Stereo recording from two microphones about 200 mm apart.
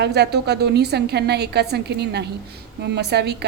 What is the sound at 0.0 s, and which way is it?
A woman's voice, 55° right (ahead or behind).